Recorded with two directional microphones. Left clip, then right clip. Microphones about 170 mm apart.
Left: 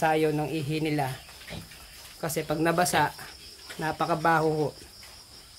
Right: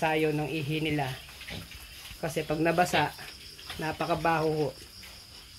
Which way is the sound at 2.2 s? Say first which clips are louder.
Left 1 dB; 10° left (ahead or behind).